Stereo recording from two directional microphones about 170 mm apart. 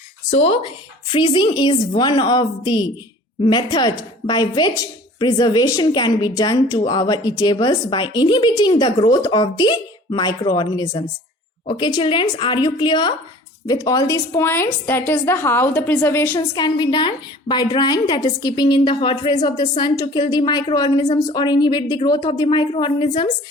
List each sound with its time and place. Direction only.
0.3 s a woman's voice: 35° left (ahead or behind); by 16.5 s 15° left (ahead or behind)
16.6 s a woman's voice: 25° left (ahead or behind)